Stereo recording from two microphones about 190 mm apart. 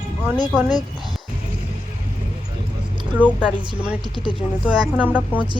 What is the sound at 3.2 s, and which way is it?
Speech, 10° right (ahead or behind).